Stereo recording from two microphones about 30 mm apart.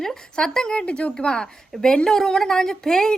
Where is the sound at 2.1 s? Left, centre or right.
Centre.